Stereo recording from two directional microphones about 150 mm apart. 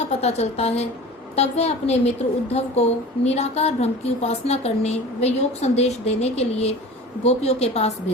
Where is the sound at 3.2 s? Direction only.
45° left (ahead or behind).